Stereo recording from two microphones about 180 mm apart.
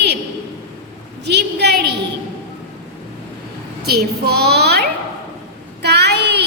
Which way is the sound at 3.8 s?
60° right (ahead or behind).